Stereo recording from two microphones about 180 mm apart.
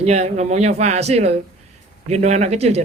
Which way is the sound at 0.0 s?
40° right (ahead or behind).